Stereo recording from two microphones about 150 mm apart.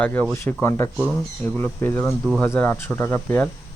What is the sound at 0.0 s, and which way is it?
Speech, 10° left (ahead or behind).